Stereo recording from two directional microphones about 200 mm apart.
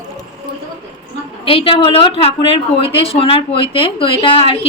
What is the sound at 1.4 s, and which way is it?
A woman's voice, 25° left (ahead or behind).